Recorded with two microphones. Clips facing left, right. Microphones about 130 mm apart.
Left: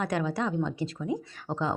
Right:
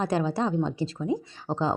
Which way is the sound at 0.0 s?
30° right (ahead or behind).